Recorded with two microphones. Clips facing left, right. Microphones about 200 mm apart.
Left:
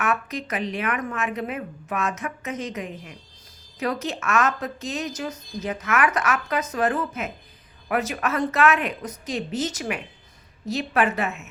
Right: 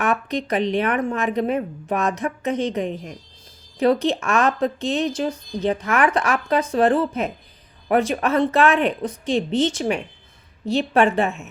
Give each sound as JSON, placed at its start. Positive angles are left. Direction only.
{"t": 0.0, "sound": "speech", "side_deg": -35}